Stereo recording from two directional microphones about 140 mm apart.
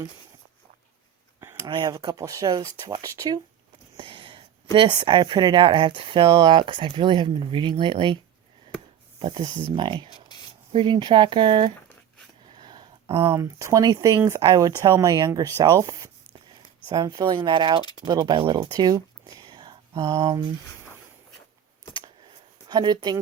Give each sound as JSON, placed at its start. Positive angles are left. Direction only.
{"t": 1.6, "sound": "speech", "side_deg": -30}
{"t": 3.9, "sound": "speech", "side_deg": -40}
{"t": 10.2, "sound": "rub", "side_deg": 30}
{"t": 10.7, "sound": "speech", "side_deg": -35}
{"t": 12.5, "sound": "a sound", "side_deg": -35}
{"t": 13.3, "sound": "speech", "side_deg": -20}
{"t": 22.7, "sound": "speech", "side_deg": -30}